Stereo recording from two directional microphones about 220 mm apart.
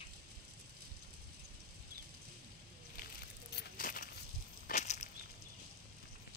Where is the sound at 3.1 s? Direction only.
45° left (ahead or behind).